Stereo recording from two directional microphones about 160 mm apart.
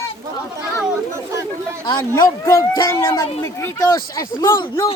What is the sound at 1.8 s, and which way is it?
Speech, 30° left (ahead or behind).